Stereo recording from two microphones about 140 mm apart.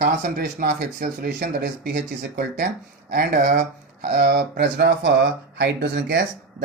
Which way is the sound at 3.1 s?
90° right.